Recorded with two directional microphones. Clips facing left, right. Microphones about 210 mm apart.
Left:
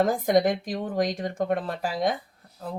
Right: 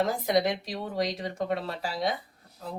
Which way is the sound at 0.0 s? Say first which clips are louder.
Left 4 dB; 50° left (ahead or behind).